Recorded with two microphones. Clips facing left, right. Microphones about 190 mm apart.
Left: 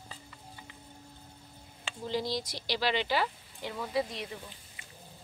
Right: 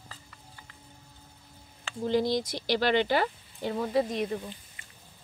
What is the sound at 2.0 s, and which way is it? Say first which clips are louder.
Speech: right 7 dB; 55° right (ahead or behind).